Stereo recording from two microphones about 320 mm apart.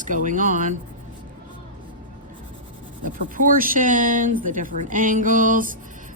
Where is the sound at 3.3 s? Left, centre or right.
Right.